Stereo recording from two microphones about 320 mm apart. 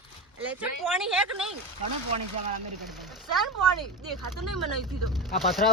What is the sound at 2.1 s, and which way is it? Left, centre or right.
Speech, centre.